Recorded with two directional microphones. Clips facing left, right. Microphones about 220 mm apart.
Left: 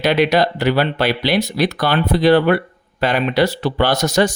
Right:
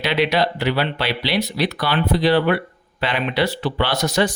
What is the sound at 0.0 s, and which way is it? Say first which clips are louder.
A man's voice: left 4 dB; 45° left (ahead or behind).